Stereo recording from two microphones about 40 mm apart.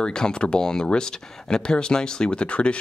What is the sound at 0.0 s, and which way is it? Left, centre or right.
Speech, left.